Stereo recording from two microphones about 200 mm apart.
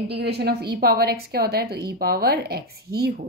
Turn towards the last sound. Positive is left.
turn(degrees=-50)  # may be behind; listen again after turning